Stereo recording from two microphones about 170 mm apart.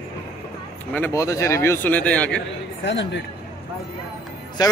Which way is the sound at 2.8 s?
90° left.